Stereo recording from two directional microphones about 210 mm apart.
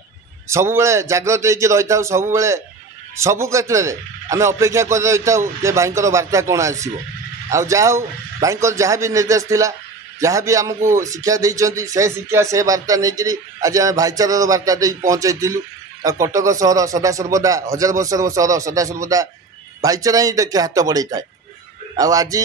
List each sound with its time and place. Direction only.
0.5 s a man's voice: 15° right (ahead or behind)